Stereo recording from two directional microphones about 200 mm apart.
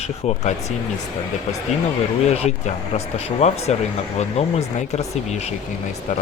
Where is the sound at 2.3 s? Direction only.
35° left (ahead or behind).